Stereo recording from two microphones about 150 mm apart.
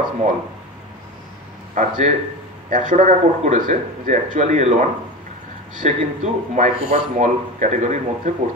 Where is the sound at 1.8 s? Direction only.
55° right (ahead or behind).